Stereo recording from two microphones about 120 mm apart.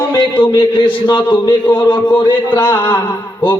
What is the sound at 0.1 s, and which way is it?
Speech, 40° left (ahead or behind).